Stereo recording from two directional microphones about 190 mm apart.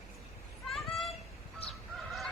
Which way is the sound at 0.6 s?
Centre (ahead or behind).